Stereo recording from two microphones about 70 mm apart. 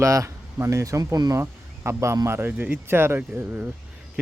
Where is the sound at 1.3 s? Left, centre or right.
Right.